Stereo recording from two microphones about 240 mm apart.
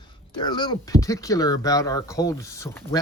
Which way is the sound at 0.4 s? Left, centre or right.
Centre.